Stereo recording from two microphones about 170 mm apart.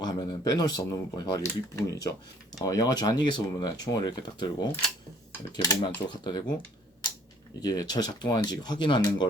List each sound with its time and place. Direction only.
0.0 s speech: 25° left (ahead or behind)
7.6 s speech: 20° left (ahead or behind)